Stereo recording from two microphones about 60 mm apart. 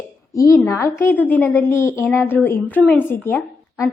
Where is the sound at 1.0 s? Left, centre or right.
Left.